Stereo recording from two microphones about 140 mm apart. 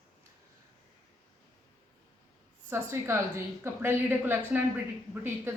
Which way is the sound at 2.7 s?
20° right (ahead or behind).